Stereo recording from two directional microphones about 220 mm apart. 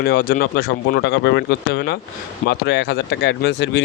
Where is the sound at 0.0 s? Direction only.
45° left (ahead or behind).